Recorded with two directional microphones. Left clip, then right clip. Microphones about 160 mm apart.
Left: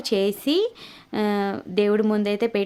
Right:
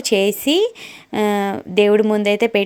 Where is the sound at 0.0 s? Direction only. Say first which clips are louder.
Right 6 dB; 20° right (ahead or behind).